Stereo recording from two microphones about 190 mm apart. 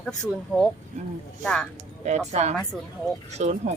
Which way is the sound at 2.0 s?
35° right (ahead or behind).